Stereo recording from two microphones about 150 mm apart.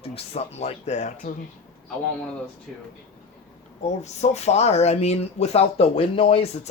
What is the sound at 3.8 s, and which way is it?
Speech, 50° left (ahead or behind).